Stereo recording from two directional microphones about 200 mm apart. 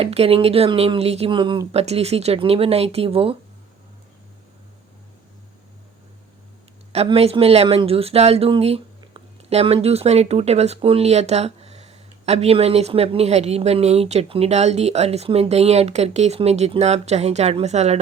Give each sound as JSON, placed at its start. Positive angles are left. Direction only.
{"t": 0.0, "sound": "speech", "side_deg": -30}
{"t": 6.9, "sound": "speech", "side_deg": -30}